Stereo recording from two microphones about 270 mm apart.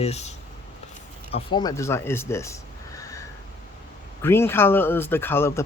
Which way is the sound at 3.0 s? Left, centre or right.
Centre.